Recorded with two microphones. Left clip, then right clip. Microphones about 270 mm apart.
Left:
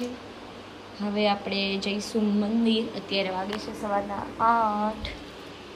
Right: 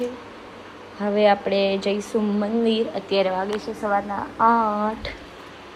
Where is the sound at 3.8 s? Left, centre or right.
Right.